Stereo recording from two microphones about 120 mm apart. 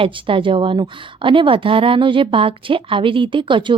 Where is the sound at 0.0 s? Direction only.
45° right (ahead or behind).